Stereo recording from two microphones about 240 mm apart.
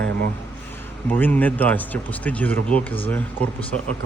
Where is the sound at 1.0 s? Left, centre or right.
Centre.